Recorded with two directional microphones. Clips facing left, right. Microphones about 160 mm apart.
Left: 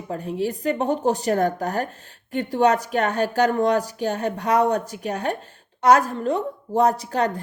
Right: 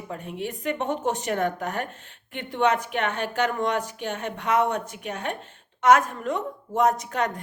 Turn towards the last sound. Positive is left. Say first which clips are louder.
# left 4 dB
turn(degrees=35)  # may be behind; listen again after turning